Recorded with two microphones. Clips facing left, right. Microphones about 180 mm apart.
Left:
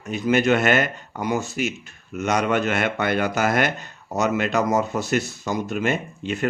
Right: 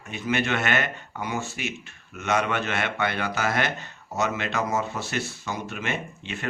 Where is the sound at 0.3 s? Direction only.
40° left (ahead or behind).